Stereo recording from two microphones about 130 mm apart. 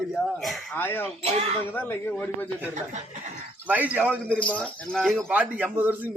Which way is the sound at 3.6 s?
10° right (ahead or behind).